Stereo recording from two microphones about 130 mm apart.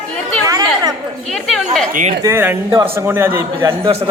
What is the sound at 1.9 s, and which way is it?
Speech, 80° right.